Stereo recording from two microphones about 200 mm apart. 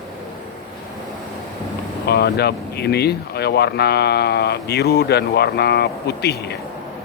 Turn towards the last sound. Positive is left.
turn(degrees=55)  # may be behind; listen again after turning